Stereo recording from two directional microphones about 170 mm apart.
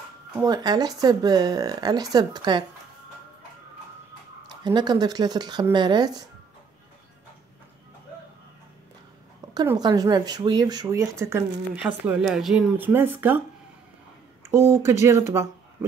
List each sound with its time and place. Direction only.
0.4 s speech: 25° right (ahead or behind)
4.6 s speech: 25° right (ahead or behind)
9.4 s a sound: 20° right (ahead or behind)
9.8 s speech: 25° right (ahead or behind)
14.5 s speech: 15° right (ahead or behind)